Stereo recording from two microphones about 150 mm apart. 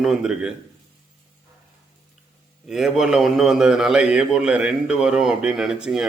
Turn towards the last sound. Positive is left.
turn(degrees=-5)  # may be behind; listen again after turning